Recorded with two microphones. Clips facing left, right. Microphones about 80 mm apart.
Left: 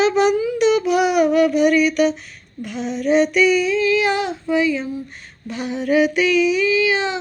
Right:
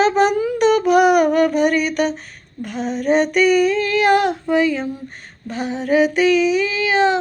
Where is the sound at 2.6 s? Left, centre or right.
Right.